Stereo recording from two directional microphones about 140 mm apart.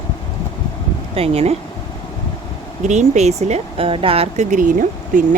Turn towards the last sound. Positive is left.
turn(degrees=-70)  # may be behind; listen again after turning